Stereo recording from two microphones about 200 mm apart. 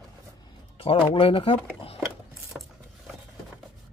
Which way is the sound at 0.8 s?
25° left (ahead or behind).